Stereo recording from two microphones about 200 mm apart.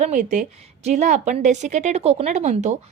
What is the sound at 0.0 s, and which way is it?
A woman's voice, 40° right (ahead or behind).